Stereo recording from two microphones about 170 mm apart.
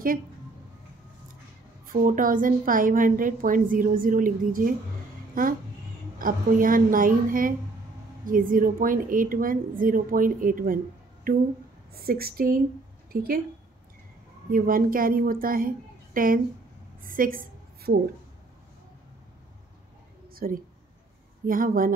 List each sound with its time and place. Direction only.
1.9 s a woman's voice: 55° right (ahead or behind)
6.1 s a woman's voice: 55° right (ahead or behind)
14.5 s a woman's voice: 55° right (ahead or behind)
17.0 s a sound: 55° right (ahead or behind)
20.3 s a woman's voice: 60° right (ahead or behind)